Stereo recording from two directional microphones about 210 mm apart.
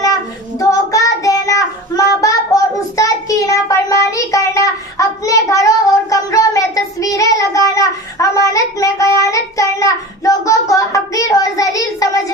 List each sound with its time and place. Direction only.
0.6 s child singing: 15° left (ahead or behind)